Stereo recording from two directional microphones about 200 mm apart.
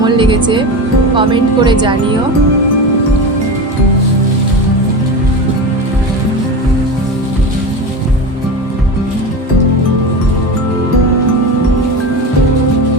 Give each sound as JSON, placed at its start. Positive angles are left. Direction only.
{"t": 0.0, "sound": "music", "side_deg": -25}
{"t": 1.1, "sound": "speech", "side_deg": -25}